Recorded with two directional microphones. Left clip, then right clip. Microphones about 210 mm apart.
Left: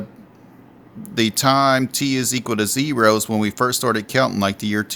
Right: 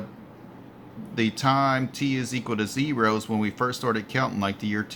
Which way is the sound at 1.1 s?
60° left (ahead or behind).